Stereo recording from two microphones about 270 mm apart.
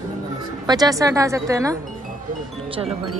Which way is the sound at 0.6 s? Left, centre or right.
Centre.